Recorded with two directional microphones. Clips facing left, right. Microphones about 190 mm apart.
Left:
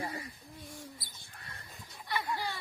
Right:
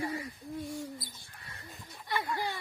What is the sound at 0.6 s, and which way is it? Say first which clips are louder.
Speech: right 7 dB; centre (ahead or behind).